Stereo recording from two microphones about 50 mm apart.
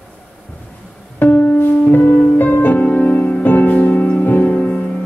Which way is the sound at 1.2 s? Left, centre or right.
Left.